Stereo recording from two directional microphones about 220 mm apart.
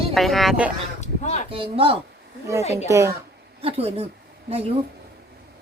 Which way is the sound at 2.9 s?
15° right (ahead or behind).